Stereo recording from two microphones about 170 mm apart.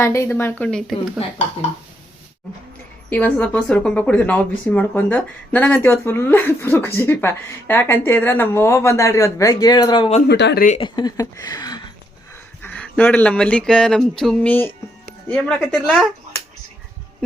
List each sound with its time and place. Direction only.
0.0 s speech: 15° left (ahead or behind)
0.6 s a woman's voice: 5° left (ahead or behind)
3.1 s speech: 10° left (ahead or behind); by 10.1 s 25° left (ahead or behind)
10.2 s speech: 80° left
10.8 s speech: 25° left (ahead or behind)
12.6 s a woman's voice: 10° left (ahead or behind)